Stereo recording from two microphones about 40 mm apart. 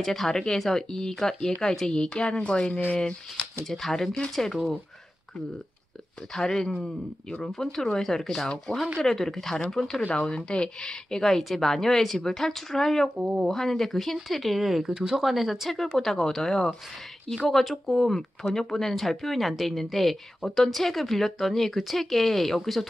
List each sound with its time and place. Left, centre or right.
0.0 s a woman's voice: centre; by 2.8 s left
3.6 s a woman's voice: centre
6.3 s a woman's voice: centre
8.7 s speech: left
9.0 s a woman's voice: centre
10.3 s a woman's voice: left; by 14.9 s centre
14.9 s speech: centre
15.2 s speech: centre